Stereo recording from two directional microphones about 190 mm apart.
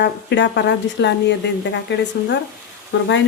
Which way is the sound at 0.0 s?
70° left (ahead or behind).